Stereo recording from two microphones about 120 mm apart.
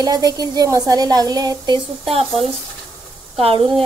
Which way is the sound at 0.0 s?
30° right (ahead or behind).